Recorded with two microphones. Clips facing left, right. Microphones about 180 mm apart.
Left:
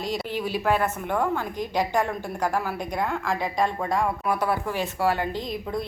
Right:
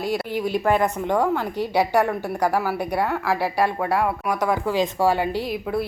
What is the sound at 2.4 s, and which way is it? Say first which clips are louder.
Speech: right 4 dB; 5° right (ahead or behind).